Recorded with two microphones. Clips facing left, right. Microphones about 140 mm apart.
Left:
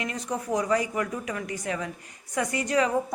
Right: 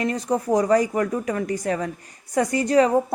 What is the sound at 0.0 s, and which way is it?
A woman's voice, 35° right (ahead or behind).